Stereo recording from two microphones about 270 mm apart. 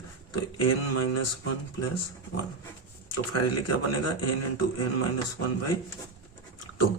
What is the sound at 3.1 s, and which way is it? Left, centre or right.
A man's voice, left.